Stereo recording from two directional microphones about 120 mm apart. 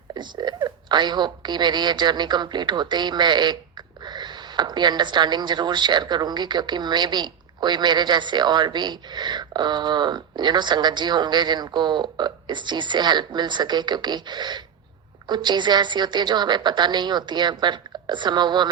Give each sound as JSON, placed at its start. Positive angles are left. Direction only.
{"t": 0.1, "sound": "speech", "side_deg": -35}